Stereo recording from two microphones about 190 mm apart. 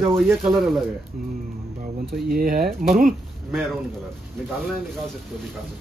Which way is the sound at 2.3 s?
50° right (ahead or behind).